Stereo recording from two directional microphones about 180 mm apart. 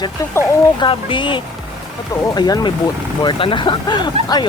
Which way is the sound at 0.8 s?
25° left (ahead or behind).